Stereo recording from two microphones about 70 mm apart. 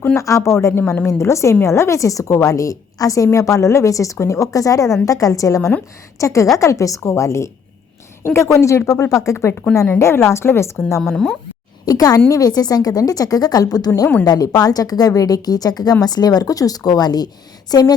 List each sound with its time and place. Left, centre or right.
0.2 s a woman's voice: left
11.1 s speech: centre
11.9 s a woman's voice: left